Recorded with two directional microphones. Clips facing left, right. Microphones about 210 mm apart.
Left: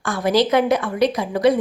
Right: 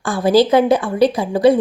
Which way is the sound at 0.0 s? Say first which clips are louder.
Right 5 dB; 30° right (ahead or behind).